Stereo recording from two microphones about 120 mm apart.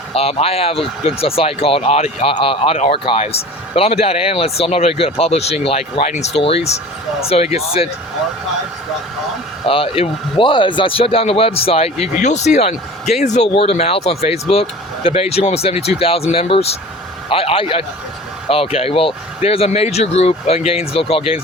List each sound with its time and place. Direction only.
0.1 s a man's voice: 55° left (ahead or behind)
6.4 s speech: 55° left (ahead or behind)
9.6 s a man's voice: 50° left (ahead or behind); by 13.5 s 70° left (ahead or behind)
13.5 s a man's voice: 55° left (ahead or behind)